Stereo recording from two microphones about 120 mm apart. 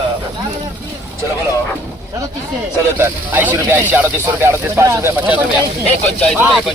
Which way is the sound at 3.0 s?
15° right (ahead or behind).